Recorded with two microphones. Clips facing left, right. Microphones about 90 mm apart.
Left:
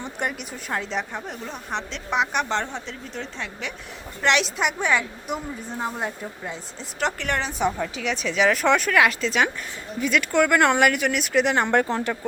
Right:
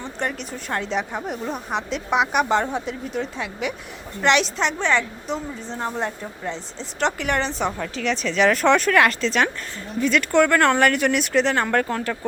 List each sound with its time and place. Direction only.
0.0 s a woman's voice: 10° left (ahead or behind)
11.5 s speech: 20° left (ahead or behind)